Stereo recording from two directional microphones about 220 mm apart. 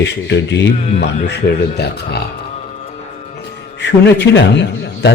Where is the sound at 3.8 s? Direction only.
50° left (ahead or behind).